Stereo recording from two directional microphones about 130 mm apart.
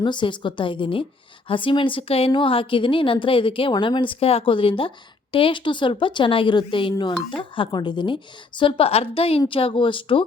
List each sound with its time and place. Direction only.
0.0 s a woman's voice: 35° left (ahead or behind)